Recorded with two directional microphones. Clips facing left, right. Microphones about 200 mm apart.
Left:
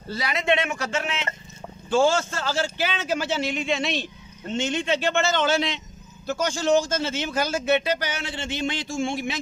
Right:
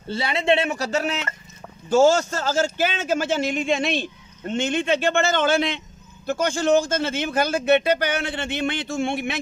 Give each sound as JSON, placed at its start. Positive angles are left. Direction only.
{"t": 0.1, "sound": "a man's voice", "side_deg": -30}